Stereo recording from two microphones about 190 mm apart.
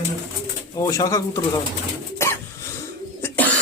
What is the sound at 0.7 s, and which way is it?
Speech, 20° left (ahead or behind).